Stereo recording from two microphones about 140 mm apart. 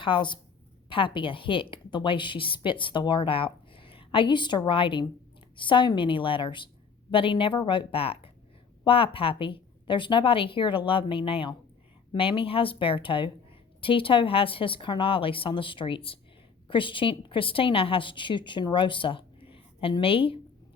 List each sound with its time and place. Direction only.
0.0 s a woman's voice: 35° left (ahead or behind)